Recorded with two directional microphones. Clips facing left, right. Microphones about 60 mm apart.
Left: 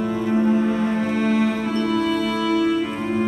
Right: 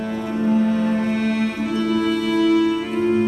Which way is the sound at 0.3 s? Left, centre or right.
Centre.